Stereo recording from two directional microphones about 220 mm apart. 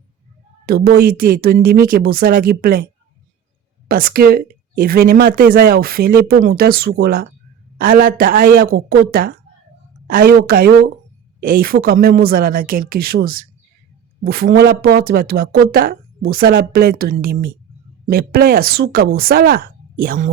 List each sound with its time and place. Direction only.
0.6 s speech: 45° right (ahead or behind)
3.8 s a woman's voice: 40° right (ahead or behind)